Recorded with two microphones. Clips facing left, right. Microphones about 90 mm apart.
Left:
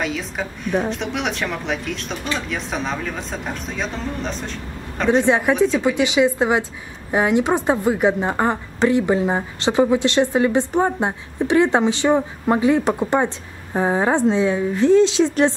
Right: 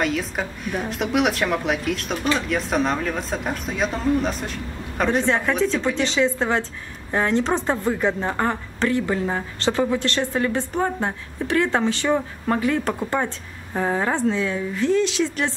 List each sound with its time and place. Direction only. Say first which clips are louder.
0.0 s speech: right 1 dB; centre (ahead or behind)
5.2 s a woman's voice: left 4 dB; 15° left (ahead or behind)